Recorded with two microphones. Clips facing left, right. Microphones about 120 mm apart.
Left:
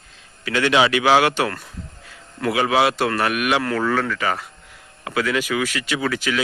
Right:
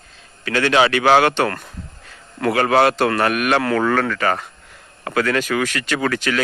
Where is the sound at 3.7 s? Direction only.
65° right (ahead or behind).